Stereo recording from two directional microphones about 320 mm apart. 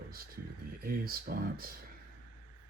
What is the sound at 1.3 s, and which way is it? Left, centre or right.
Speech, right.